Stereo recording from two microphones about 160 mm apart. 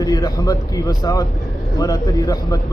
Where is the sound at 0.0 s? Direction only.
25° left (ahead or behind).